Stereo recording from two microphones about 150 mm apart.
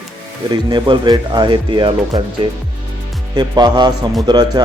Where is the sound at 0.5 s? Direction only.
30° right (ahead or behind).